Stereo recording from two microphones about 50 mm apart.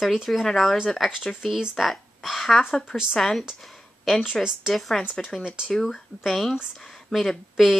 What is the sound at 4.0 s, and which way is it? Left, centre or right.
Speech, centre.